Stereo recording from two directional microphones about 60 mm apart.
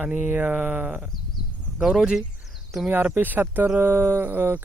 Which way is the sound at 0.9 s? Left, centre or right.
Centre.